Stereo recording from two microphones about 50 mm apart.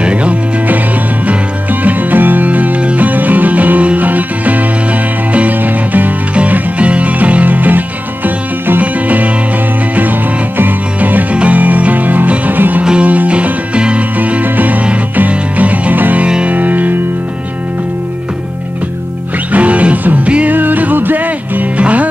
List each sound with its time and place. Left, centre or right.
0.0 s music: right
10.6 s music: right
19.5 s music: right